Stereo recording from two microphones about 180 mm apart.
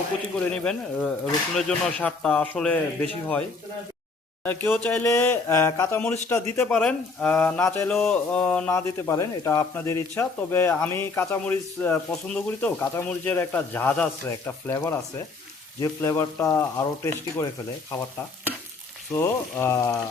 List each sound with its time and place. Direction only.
0.3 s speech: 5° left (ahead or behind)
4.4 s speech: 10° left (ahead or behind)
19.1 s speech: 15° left (ahead or behind)